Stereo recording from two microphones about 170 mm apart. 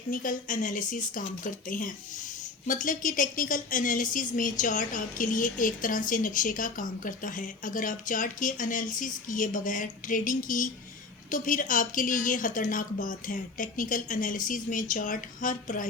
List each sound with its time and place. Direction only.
0.1 s a woman's voice: 50° left (ahead or behind)